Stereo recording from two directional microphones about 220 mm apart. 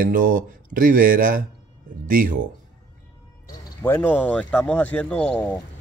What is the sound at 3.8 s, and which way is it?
Speech, 10° left (ahead or behind).